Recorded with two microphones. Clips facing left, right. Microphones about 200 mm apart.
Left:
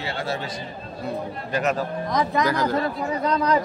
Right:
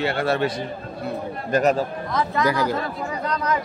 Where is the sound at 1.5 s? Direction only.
45° right (ahead or behind).